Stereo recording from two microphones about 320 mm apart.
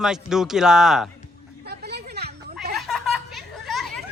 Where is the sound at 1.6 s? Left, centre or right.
Right.